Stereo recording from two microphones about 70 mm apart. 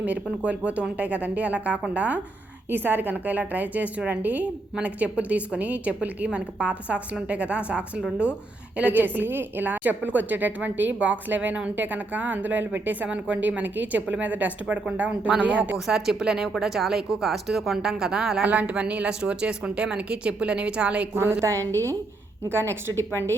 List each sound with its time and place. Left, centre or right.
0.0 s a woman's voice: centre
15.9 s a woman's voice: centre
18.4 s a woman's voice: centre
21.2 s a woman's voice: right
23.1 s a woman's voice: left